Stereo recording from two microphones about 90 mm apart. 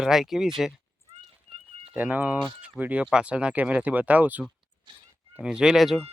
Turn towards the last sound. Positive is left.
turn(degrees=0)  # may be behind; listen again after turning